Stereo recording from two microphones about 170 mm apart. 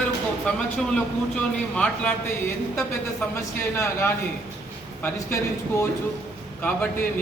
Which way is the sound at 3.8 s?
15° left (ahead or behind).